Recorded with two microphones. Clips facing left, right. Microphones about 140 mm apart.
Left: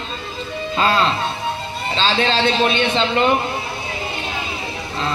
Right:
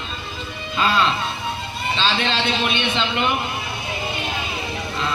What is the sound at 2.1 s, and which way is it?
Speech, 40° left (ahead or behind).